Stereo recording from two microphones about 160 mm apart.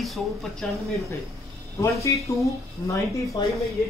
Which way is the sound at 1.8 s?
20° left (ahead or behind).